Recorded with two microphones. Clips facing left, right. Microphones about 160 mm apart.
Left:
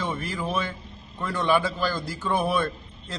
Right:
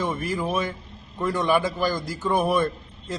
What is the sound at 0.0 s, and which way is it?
A man's voice, 10° right (ahead or behind).